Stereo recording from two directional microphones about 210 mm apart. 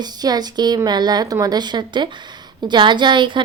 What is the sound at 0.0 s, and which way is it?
A woman's voice, 20° right (ahead or behind).